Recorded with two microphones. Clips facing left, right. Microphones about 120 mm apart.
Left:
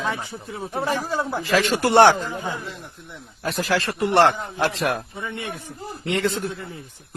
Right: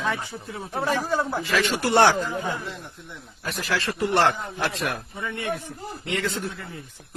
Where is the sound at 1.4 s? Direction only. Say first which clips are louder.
Left 4 dB; 35° left (ahead or behind).